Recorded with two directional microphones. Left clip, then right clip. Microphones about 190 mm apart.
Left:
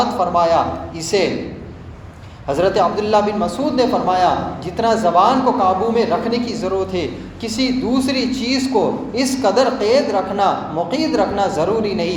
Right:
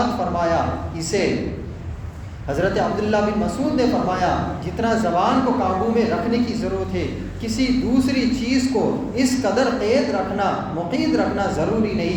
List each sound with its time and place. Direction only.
0.3 s a man's voice: 20° left (ahead or behind)
2.5 s a man's voice: 20° left (ahead or behind)